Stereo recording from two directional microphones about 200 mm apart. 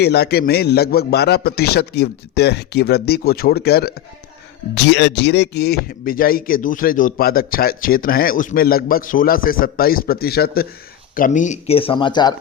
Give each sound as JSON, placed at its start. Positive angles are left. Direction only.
{"t": 0.0, "sound": "speech", "side_deg": 55}